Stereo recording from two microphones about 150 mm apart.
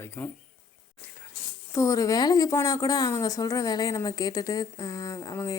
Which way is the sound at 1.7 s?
20° left (ahead or behind).